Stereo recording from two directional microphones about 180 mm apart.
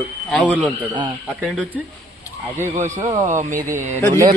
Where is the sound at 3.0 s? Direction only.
20° right (ahead or behind).